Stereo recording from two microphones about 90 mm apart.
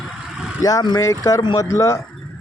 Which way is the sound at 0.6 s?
45° left (ahead or behind).